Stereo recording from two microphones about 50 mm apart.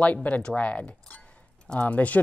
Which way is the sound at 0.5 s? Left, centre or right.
Left.